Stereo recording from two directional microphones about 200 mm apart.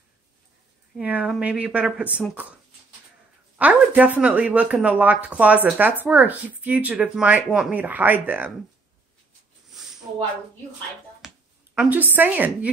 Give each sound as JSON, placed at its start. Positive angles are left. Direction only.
{"t": 0.9, "sound": "speech", "side_deg": -5}
{"t": 3.5, "sound": "speech", "side_deg": -5}
{"t": 11.1, "sound": "speech", "side_deg": -5}